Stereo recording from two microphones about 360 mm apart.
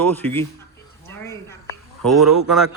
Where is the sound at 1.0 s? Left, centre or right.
Centre.